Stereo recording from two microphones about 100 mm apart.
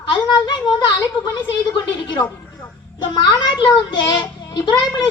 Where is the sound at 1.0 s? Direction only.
50° left (ahead or behind).